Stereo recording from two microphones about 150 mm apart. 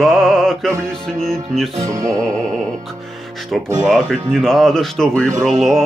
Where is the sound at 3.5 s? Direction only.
Centre (ahead or behind).